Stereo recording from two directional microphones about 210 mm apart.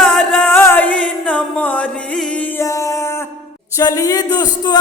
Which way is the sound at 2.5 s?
15° left (ahead or behind).